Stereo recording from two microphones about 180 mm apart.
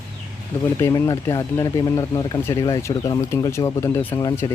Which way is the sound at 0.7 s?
15° left (ahead or behind).